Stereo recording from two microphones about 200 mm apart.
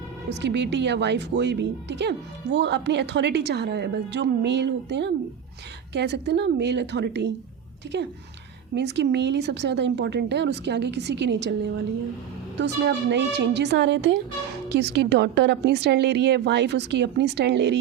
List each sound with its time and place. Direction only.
0.3 s speech: 60° right (ahead or behind)
12.5 s speech: 60° right (ahead or behind)